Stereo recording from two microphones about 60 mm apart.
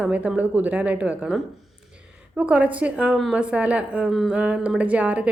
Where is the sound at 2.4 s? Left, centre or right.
Right.